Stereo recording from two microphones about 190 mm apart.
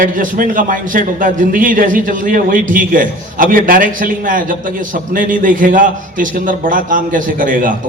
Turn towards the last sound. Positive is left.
turn(degrees=-45)  # may be behind; listen again after turning